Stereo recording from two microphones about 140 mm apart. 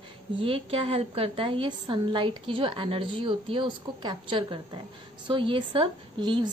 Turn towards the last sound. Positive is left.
turn(degrees=-35)  # may be behind; listen again after turning